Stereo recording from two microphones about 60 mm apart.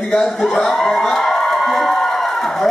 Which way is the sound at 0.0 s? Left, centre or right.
Centre.